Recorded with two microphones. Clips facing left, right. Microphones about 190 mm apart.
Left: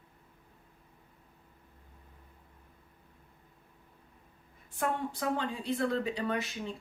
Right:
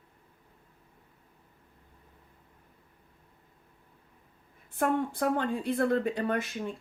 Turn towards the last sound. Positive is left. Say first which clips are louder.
# right 3 dB
turn(degrees=-50)  # may be behind; listen again after turning